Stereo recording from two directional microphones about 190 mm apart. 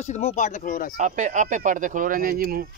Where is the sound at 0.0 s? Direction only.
35° left (ahead or behind).